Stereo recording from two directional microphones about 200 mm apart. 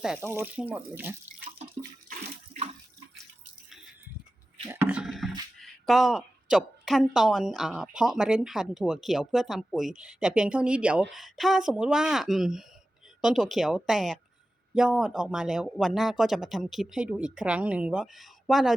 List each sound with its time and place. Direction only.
0.0 s speech: 5° right (ahead or behind)
1.6 s water: 30° right (ahead or behind)
4.7 s speech: 10° right (ahead or behind)